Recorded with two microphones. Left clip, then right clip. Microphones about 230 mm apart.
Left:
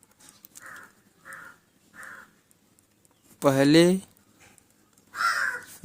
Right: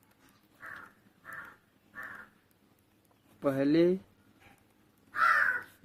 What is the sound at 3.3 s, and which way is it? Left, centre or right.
Speech, left.